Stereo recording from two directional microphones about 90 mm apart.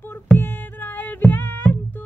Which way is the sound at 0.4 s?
25° left (ahead or behind).